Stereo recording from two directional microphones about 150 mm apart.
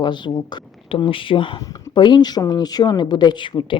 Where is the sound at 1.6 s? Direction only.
25° left (ahead or behind).